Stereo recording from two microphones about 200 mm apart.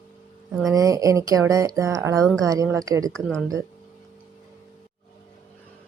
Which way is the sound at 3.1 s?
5° left (ahead or behind).